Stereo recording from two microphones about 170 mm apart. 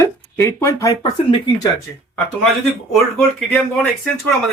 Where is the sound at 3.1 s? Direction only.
10° left (ahead or behind).